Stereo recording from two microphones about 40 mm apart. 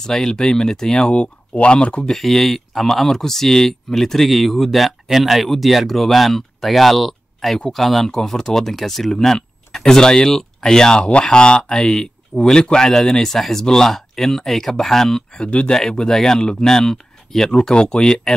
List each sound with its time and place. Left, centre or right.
0.1 s speech: centre
1.1 s speech: left
2.0 s speech: centre
11.0 s speech: left; by 15.2 s centre
15.3 s speech: left
15.7 s speech: centre